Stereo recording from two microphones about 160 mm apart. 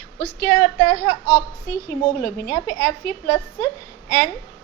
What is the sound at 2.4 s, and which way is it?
Speech, 60° left (ahead or behind).